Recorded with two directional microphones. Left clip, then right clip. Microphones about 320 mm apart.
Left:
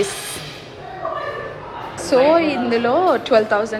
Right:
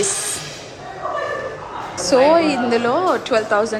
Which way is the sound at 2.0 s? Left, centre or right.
Centre.